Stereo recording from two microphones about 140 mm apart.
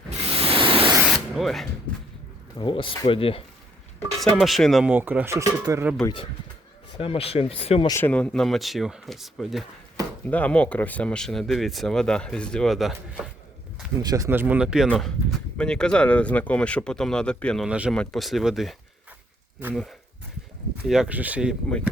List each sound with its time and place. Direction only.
0.3 s pink noise: 40° right (ahead or behind)
1.0 s spray: centre (ahead or behind)
1.9 s speech: 10° left (ahead or behind)
2.6 s speech: 35° left (ahead or behind)
4.2 s speech: centre (ahead or behind)
4.9 s speech: 10° right (ahead or behind)
6.9 s speech: 40° left (ahead or behind)
7.9 s speech: 15° left (ahead or behind); by 9.6 s centre (ahead or behind)
10.2 s speech: 10° left (ahead or behind)
14.0 s speech: 30° right (ahead or behind)
14.3 s speech: 15° right (ahead or behind)
15.5 s speech: 5° left (ahead or behind)
17.7 s speech: 10° right (ahead or behind)
17.9 s speech: 5° left (ahead or behind)